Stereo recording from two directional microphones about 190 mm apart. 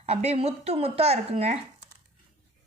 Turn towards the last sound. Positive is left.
turn(degrees=-35)  # may be behind; listen again after turning